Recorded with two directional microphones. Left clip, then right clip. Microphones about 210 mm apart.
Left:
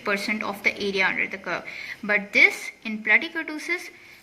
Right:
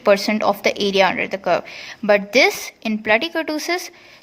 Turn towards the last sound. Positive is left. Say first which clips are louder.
# right 7 dB
turn(degrees=-50)  # may be behind; listen again after turning